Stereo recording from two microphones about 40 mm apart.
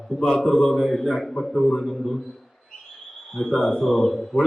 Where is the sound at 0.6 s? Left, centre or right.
Centre.